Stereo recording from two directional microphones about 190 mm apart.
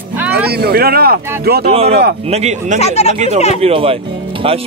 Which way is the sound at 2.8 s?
35° left (ahead or behind).